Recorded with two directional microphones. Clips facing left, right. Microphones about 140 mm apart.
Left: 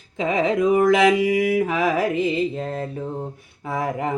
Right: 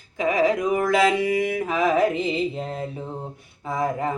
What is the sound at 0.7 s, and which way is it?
Mantra, 20° left (ahead or behind).